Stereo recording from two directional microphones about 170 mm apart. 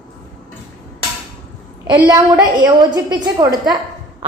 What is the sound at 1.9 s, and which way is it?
A woman's voice, 30° right (ahead or behind).